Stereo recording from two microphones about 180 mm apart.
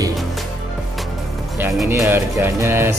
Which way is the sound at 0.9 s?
Centre (ahead or behind).